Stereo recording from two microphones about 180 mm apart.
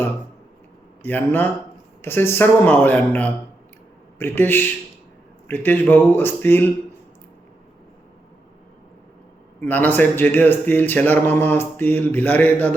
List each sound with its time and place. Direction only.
1.0 s a man's voice: 10° left (ahead or behind)
9.6 s a man's voice: 10° left (ahead or behind)